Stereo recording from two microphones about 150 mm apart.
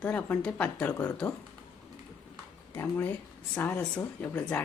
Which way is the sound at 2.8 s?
15° left (ahead or behind).